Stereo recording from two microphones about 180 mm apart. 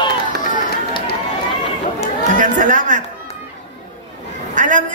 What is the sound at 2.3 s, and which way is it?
Speech, 45° right (ahead or behind).